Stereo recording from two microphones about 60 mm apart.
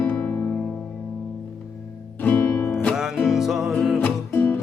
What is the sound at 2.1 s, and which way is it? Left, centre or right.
Music, left.